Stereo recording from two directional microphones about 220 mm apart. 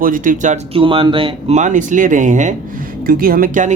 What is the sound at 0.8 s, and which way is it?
Speech, 25° right (ahead or behind).